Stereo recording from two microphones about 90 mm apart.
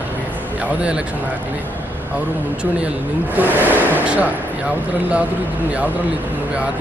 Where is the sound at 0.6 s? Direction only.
10° right (ahead or behind).